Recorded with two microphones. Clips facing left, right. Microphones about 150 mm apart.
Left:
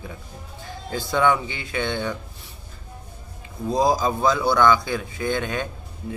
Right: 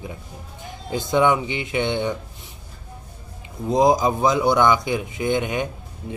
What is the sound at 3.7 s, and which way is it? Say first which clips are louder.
A man's voice: right 3 dB; 20° right (ahead or behind).